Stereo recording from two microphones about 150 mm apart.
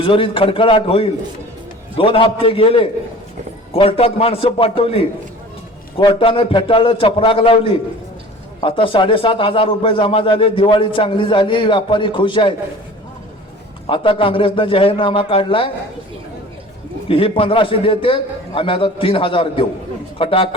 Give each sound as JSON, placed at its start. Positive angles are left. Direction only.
{"t": 0.0, "sound": "a man's voice", "side_deg": 35}
{"t": 13.8, "sound": "a man's voice", "side_deg": 35}
{"t": 17.1, "sound": "a man's voice", "side_deg": 40}